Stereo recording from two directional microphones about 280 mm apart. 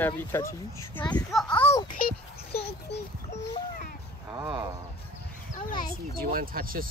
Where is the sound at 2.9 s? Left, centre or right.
Left.